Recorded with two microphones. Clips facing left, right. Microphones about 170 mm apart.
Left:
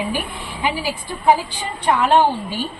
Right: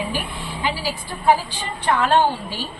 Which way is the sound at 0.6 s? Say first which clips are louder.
Left 3 dB; 15° left (ahead or behind).